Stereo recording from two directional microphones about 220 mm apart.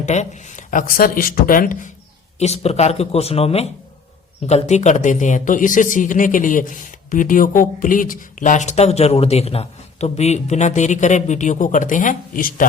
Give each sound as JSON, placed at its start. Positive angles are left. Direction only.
{"t": 0.0, "sound": "a man's voice", "side_deg": 30}